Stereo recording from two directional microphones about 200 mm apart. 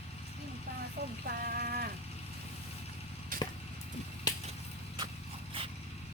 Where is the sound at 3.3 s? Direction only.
45° right (ahead or behind).